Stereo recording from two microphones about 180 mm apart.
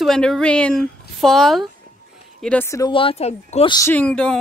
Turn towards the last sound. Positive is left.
turn(degrees=5)  # may be behind; listen again after turning